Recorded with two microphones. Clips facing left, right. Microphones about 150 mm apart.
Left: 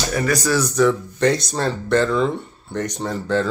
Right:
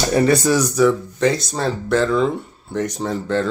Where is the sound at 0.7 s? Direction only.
Centre (ahead or behind).